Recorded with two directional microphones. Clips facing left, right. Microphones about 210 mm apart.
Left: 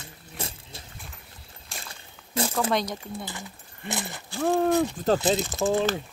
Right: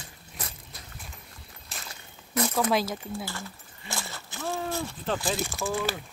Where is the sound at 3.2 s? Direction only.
20° left (ahead or behind).